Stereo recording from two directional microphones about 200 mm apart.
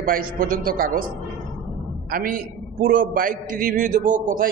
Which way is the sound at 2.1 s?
45° right (ahead or behind).